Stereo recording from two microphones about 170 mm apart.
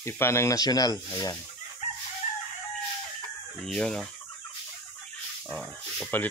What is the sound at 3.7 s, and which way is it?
Fowl, 5° left (ahead or behind).